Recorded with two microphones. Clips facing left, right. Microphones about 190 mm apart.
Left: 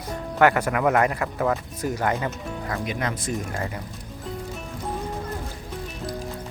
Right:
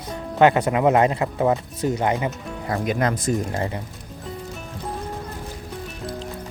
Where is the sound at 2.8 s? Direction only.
40° right (ahead or behind).